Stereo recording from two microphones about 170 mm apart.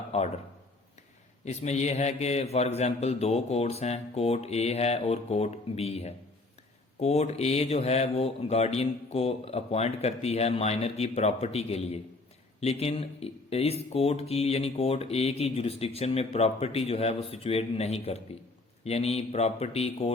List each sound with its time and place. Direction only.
0.1 s speech: 40° left (ahead or behind)
1.5 s speech: 40° left (ahead or behind)